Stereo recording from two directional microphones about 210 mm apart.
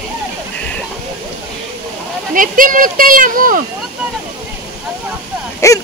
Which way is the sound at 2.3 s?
40° right (ahead or behind).